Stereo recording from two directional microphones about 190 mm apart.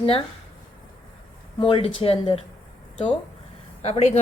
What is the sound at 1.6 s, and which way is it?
Speech, 30° left (ahead or behind).